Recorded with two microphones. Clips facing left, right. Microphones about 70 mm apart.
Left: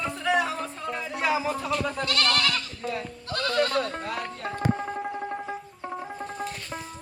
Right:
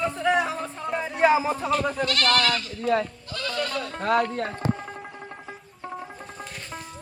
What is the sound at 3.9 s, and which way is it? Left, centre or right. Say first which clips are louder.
Speech: right 9 dB; right.